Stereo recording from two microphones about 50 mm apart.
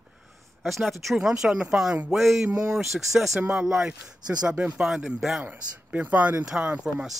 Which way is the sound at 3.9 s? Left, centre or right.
Centre.